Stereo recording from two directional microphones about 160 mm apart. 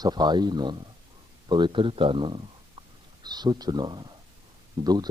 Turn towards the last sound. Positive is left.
turn(degrees=-25)  # may be behind; listen again after turning